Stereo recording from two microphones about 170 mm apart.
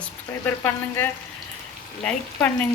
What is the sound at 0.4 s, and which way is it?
Frying, 15° left (ahead or behind).